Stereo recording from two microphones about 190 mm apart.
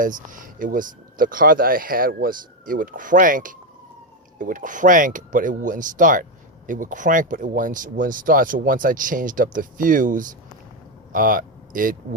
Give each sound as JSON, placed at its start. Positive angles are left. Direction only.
{"t": 0.0, "sound": "speech", "side_deg": -45}